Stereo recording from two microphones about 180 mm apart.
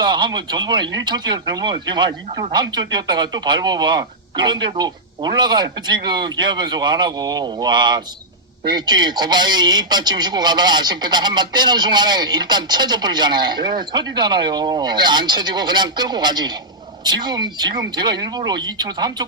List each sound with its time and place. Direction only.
0.0 s speech: 25° right (ahead or behind)